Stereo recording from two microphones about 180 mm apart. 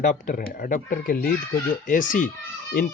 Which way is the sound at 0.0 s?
45° left (ahead or behind).